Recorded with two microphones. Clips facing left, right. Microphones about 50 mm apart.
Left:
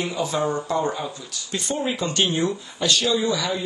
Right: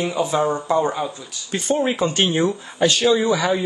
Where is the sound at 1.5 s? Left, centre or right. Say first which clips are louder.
Right 5 dB; right.